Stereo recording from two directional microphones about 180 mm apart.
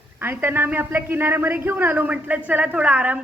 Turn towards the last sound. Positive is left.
turn(degrees=-10)  # may be behind; listen again after turning